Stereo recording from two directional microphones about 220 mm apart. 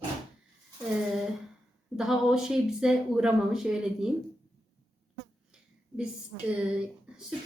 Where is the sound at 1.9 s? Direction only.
Centre (ahead or behind).